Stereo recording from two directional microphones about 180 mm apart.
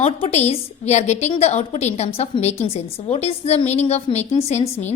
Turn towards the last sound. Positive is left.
turn(degrees=40)  # may be behind; listen again after turning